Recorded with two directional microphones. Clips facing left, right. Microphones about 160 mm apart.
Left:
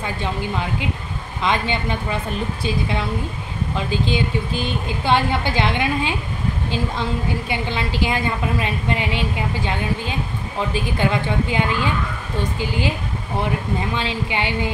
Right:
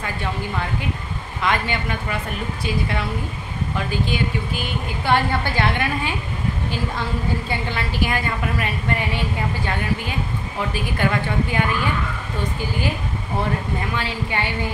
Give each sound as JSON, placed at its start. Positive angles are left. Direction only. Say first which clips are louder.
{"t": 0.2, "sound": "a woman's voice", "louder": "left 1 dB", "side_deg": 20}
{"t": 3.7, "sound": "a woman's voice", "louder": "left 2 dB", "side_deg": 25}
{"t": 7.4, "sound": "a woman's voice", "louder": "left 2 dB", "side_deg": 20}
{"t": 10.7, "sound": "a woman's voice", "louder": "left 1 dB", "side_deg": 20}
{"t": 13.9, "sound": "a woman's voice", "louder": "left 2 dB", "side_deg": 20}